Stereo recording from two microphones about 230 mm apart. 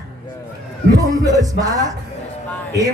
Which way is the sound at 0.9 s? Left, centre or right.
Centre.